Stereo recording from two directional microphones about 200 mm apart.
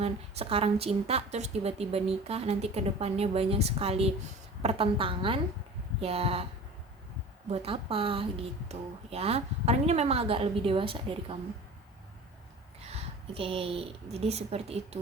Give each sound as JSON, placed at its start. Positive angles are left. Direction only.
{"t": 0.0, "sound": "a woman's voice", "side_deg": -30}
{"t": 7.5, "sound": "a woman's voice", "side_deg": -30}
{"t": 12.9, "sound": "a woman's voice", "side_deg": -30}